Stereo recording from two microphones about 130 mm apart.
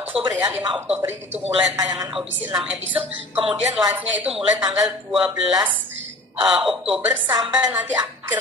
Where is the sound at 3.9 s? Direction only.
10° right (ahead or behind).